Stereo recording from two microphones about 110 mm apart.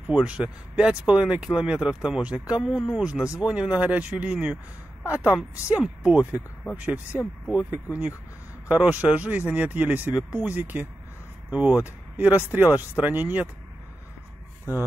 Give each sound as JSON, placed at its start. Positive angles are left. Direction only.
{"t": 0.0, "sound": "speech", "side_deg": -10}